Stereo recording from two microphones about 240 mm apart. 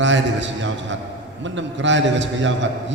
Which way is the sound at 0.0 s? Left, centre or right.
Right.